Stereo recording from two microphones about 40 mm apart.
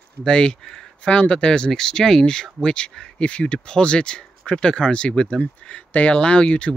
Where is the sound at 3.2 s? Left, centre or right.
Left.